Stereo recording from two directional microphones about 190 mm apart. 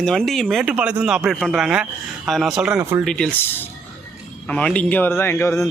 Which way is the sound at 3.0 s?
5° left (ahead or behind).